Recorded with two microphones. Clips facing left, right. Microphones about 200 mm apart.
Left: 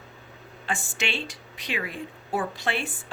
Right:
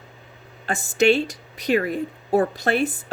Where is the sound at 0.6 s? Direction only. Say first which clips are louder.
Right 12 dB; 40° right (ahead or behind).